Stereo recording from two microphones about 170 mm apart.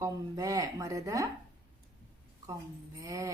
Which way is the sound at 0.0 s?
20° right (ahead or behind).